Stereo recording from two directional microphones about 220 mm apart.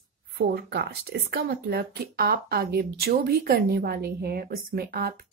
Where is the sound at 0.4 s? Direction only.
45° right (ahead or behind).